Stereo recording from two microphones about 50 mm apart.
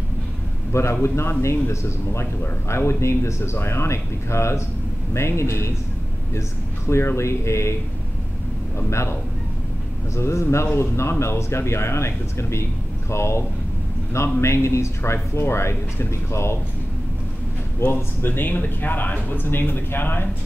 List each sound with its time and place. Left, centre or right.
1.0 s speech: left
6.9 s speech: left
8.7 s speech: left
14.4 s speech: left
17.8 s speech: left
18.2 s speech: left